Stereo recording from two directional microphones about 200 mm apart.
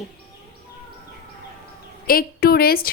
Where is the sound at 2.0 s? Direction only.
50° left (ahead or behind).